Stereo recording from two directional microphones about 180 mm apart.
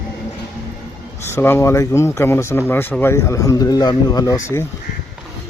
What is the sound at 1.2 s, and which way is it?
Speech, 10° left (ahead or behind).